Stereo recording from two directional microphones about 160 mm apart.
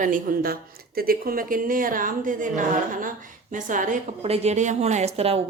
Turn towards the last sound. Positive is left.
turn(degrees=-40)  # may be behind; listen again after turning